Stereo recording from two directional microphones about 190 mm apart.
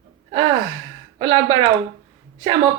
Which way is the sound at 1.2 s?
25° right (ahead or behind).